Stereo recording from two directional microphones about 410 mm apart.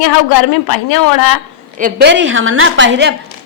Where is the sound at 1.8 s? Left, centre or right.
Right.